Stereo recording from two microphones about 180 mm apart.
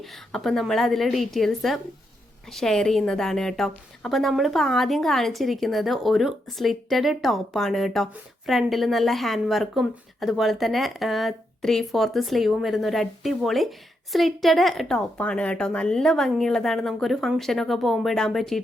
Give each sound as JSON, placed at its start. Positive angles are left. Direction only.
{"t": 0.0, "sound": "a woman's voice", "side_deg": 0}